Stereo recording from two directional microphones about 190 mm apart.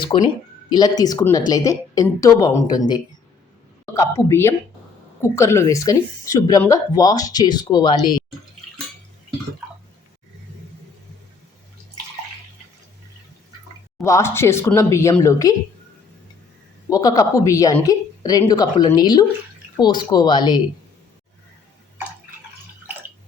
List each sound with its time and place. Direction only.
0.1 s a woman's voice: 25° left (ahead or behind)
14.0 s speech: 15° left (ahead or behind)
16.9 s a woman's voice: 20° left (ahead or behind)